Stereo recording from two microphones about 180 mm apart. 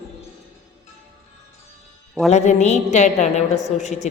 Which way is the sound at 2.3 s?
40° left (ahead or behind).